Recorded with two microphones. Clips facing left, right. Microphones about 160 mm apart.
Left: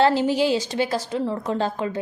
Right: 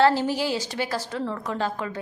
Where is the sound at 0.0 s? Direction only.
20° left (ahead or behind).